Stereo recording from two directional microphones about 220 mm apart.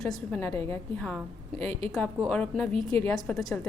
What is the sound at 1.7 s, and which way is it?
Speech, 25° right (ahead or behind).